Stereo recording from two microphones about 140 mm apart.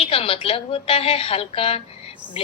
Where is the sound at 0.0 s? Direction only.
40° left (ahead or behind).